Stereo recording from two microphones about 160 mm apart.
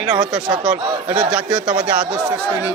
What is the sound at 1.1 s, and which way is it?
Speech, 5° right (ahead or behind).